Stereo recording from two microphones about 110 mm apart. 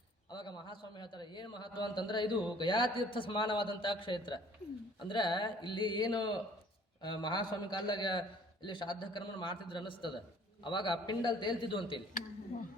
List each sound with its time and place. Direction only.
0.3 s a man's voice: 45° left (ahead or behind)